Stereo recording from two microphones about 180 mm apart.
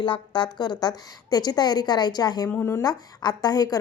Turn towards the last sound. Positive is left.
turn(degrees=20)  # may be behind; listen again after turning